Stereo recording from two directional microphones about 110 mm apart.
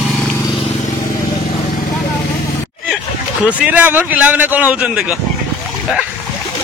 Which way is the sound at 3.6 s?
15° right (ahead or behind).